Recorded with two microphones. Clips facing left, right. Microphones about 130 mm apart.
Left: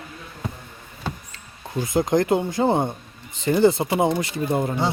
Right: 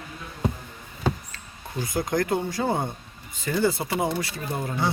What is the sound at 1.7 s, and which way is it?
Speech, 20° left (ahead or behind).